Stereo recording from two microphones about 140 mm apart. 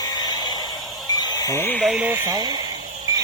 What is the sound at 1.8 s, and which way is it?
Speech, 10° right (ahead or behind).